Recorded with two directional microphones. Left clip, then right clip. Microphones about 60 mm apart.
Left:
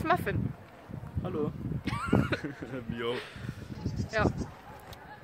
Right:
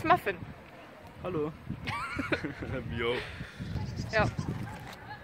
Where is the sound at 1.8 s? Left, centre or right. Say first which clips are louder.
Left 3 dB; centre.